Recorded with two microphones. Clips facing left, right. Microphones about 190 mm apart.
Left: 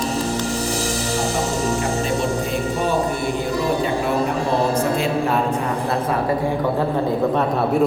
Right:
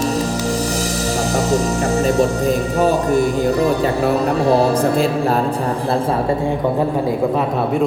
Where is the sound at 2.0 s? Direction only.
40° right (ahead or behind).